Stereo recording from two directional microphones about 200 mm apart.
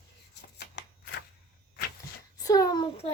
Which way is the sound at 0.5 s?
55° left (ahead or behind).